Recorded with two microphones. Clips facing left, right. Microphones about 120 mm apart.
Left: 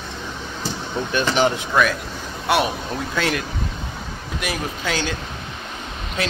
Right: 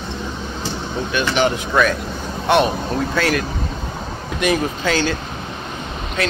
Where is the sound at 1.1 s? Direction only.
35° left (ahead or behind).